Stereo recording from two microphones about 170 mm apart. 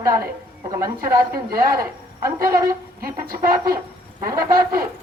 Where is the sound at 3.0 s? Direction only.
60° right (ahead or behind).